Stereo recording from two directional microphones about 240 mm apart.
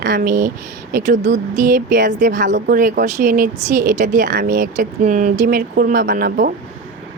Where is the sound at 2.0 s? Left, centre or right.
Right.